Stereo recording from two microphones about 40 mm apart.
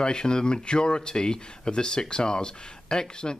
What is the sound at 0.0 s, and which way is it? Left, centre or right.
Speech, left.